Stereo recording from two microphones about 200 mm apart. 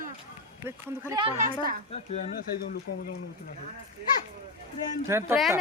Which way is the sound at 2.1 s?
40° left (ahead or behind).